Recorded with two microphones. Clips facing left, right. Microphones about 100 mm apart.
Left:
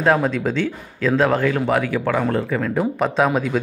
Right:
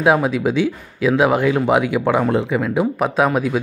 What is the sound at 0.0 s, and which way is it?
Speech, 10° right (ahead or behind).